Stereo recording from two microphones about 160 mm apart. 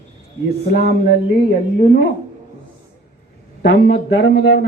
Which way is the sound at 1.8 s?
75° left (ahead or behind).